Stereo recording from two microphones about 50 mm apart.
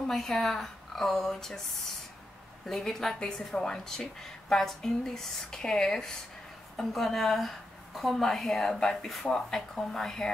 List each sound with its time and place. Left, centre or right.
0.0 s a woman's voice: centre